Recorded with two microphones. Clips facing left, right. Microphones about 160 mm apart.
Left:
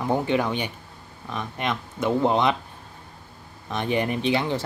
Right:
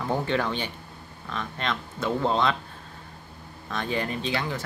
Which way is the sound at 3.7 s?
20° left (ahead or behind).